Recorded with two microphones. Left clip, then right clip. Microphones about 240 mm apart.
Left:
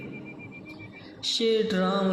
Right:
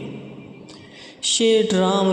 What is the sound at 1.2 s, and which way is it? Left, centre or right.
Speech, right.